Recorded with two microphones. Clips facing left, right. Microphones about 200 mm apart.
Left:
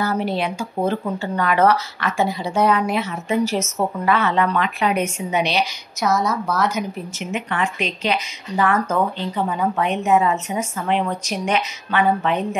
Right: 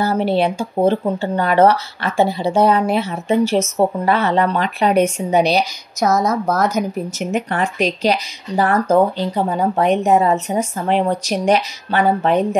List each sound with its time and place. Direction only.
0.0 s speech: 30° right (ahead or behind)